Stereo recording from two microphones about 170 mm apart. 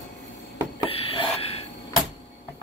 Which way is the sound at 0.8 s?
35° left (ahead or behind).